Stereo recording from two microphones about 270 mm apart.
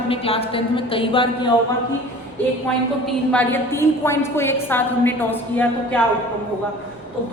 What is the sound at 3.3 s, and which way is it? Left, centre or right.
A woman's voice, centre.